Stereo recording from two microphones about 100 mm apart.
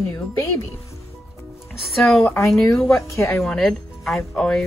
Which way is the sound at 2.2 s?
25° left (ahead or behind).